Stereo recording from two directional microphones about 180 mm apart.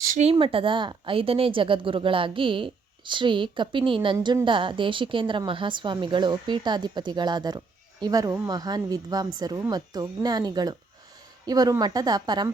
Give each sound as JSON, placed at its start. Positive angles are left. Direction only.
{"t": 0.2, "sound": "speech", "side_deg": -30}